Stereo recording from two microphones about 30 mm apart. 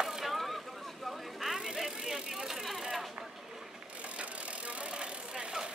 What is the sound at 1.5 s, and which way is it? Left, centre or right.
Bicycle, centre.